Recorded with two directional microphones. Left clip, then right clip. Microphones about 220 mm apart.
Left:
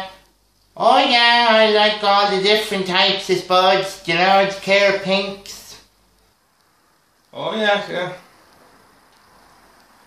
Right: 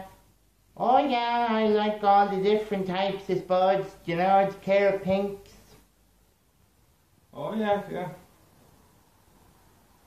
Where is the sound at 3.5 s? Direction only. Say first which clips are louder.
Left 8 dB; 25° left (ahead or behind).